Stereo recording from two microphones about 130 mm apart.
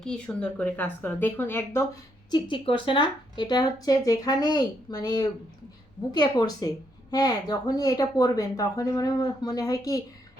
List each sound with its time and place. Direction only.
0.0 s speech: 5° left (ahead or behind)
2.3 s a woman's voice: 40° left (ahead or behind)